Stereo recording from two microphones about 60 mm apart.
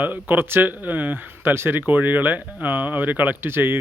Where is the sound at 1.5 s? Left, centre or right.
Right.